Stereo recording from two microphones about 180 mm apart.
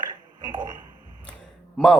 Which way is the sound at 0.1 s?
25° right (ahead or behind).